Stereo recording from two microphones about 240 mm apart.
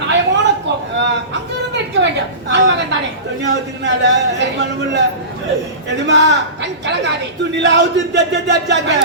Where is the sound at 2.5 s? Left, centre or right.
Right.